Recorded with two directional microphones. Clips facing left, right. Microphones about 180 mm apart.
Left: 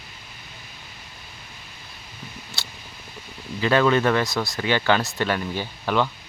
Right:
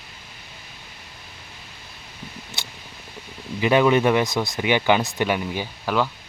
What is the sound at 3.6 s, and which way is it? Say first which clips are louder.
Speech: right 2 dB; 15° right (ahead or behind).